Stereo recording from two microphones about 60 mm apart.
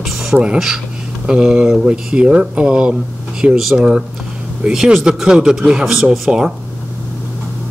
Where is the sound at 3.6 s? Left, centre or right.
Centre.